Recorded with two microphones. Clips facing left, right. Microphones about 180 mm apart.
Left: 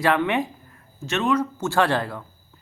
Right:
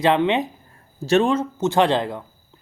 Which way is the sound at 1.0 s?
35° right (ahead or behind).